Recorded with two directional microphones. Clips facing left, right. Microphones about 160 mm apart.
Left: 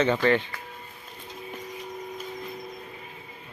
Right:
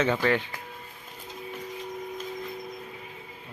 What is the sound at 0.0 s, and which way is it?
Speech, 5° right (ahead or behind).